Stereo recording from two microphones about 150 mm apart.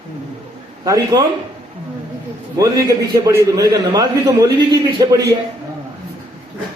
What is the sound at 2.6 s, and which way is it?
A man's voice, 20° right (ahead or behind).